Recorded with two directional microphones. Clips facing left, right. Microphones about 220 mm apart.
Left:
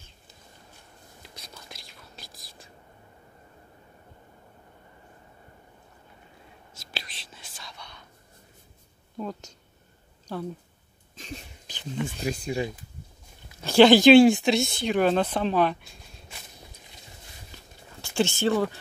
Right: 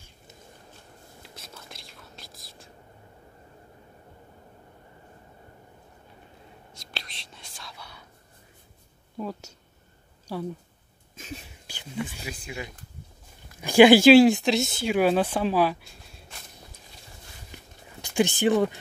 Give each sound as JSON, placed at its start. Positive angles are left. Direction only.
{"t": 1.2, "sound": "whispering", "side_deg": -5}
{"t": 6.7, "sound": "whispering", "side_deg": 0}
{"t": 9.2, "sound": "a woman's voice", "side_deg": -5}
{"t": 11.1, "sound": "a sound", "side_deg": -5}
{"t": 12.2, "sound": "speech", "side_deg": 40}
{"t": 13.6, "sound": "speech", "side_deg": -10}
{"t": 18.0, "sound": "speech", "side_deg": -15}